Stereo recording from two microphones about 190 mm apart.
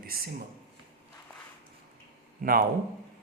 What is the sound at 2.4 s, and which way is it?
Speech, 50° right (ahead or behind).